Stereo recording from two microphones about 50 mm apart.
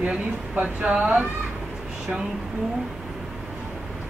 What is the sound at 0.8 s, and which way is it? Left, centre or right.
Speech, right.